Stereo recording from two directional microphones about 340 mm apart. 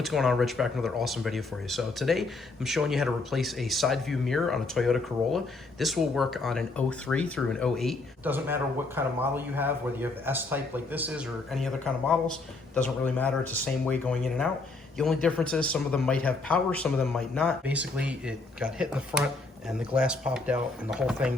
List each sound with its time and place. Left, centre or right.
0.0 s speech: centre